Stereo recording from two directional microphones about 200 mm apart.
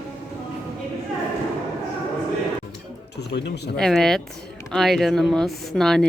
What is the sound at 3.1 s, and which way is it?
Speech, 55° left (ahead or behind).